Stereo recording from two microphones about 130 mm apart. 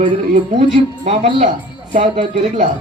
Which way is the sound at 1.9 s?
70° right (ahead or behind).